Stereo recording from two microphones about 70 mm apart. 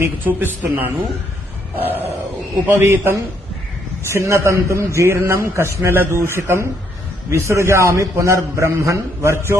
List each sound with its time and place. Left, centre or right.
0.3 s a man's voice: right